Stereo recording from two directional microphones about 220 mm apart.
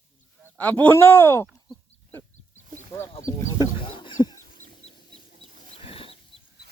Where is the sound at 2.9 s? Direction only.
10° left (ahead or behind).